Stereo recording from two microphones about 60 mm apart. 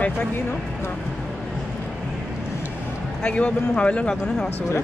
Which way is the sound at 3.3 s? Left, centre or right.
Centre.